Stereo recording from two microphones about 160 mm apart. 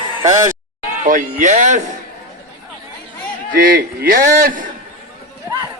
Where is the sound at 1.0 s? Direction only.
55° right (ahead or behind).